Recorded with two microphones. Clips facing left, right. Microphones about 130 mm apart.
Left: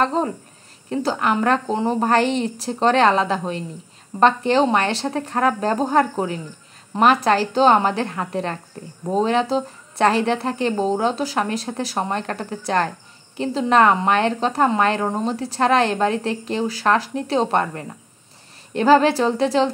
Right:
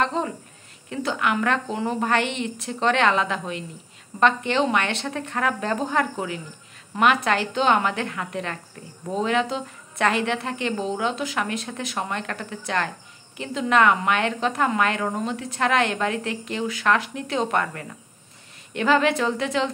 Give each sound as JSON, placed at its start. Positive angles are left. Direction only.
{"t": 0.0, "sound": "a woman's voice", "side_deg": 40}